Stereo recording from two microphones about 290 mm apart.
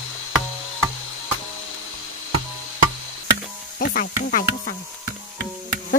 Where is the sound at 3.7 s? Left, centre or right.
Left.